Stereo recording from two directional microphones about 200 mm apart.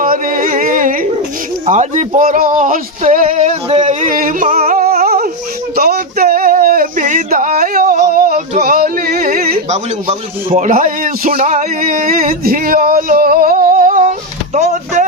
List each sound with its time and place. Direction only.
0.0 s a sound: 45° right (ahead or behind)
5.7 s male singing: 50° right (ahead or behind)
14.5 s speech: 35° right (ahead or behind)